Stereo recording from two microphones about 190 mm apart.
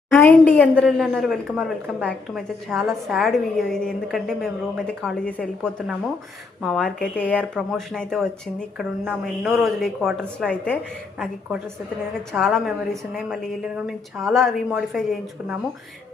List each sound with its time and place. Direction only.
0.1 s a woman's voice: 10° left (ahead or behind)
12.3 s a woman's voice: centre (ahead or behind)